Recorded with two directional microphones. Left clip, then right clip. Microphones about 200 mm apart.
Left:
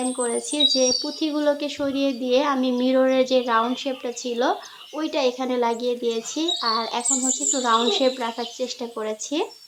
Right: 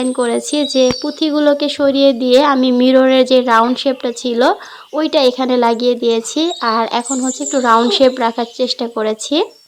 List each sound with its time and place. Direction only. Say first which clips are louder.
0.1 s a woman's voice: right 9 dB; 40° right (ahead or behind)